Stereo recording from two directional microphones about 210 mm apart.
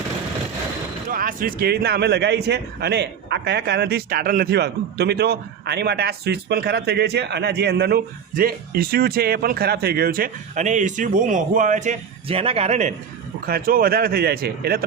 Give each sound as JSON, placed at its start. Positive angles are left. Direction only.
{"t": 1.1, "sound": "speech", "side_deg": -40}
{"t": 13.4, "sound": "speech", "side_deg": -45}